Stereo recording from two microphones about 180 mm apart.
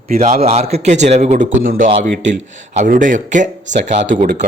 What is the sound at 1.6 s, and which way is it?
Speech, 50° right (ahead or behind).